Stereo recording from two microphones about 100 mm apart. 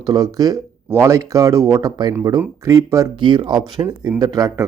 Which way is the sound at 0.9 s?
25° right (ahead or behind).